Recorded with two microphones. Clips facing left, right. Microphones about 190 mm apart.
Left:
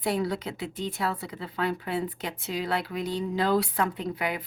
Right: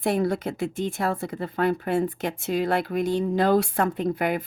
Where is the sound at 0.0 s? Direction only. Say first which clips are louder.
Right 4 dB; 50° right (ahead or behind).